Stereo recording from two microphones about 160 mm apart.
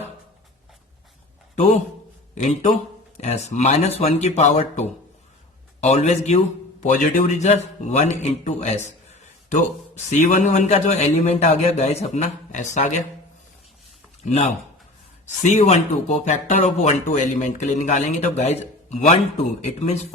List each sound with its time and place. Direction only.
2.3 s a man's voice: 45° left (ahead or behind)
10.1 s speech: 50° left (ahead or behind)
14.3 s speech: 45° left (ahead or behind)